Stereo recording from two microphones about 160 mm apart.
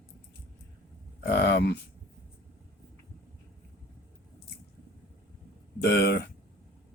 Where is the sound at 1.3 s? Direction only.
90° left.